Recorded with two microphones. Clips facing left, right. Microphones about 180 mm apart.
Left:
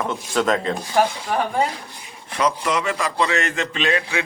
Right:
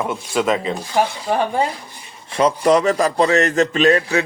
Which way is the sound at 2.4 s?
35° right (ahead or behind).